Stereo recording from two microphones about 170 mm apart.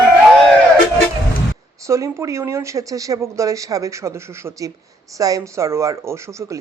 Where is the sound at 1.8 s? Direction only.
15° right (ahead or behind).